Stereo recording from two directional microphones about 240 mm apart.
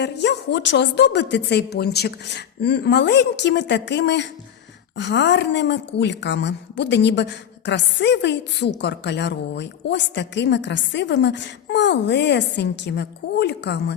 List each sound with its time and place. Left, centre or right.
0.0 s a woman's voice: left